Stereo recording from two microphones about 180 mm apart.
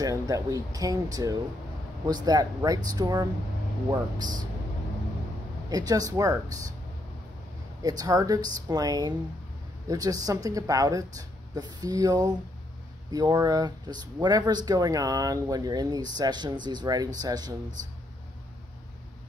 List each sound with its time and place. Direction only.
0.0 s speech: 20° right (ahead or behind)
5.7 s speech: 20° right (ahead or behind)
7.8 s speech: 20° right (ahead or behind)